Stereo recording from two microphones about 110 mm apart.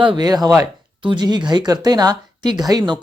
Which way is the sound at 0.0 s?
45° right (ahead or behind).